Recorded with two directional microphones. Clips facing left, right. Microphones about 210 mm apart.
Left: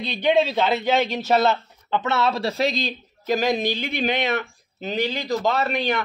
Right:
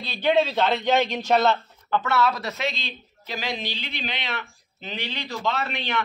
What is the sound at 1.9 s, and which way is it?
Speech, 20° left (ahead or behind).